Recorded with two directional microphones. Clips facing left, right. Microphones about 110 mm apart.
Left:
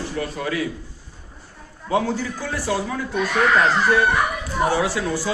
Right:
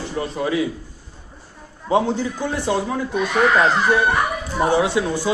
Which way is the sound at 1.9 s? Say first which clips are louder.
Right 3 dB; 20° right (ahead or behind).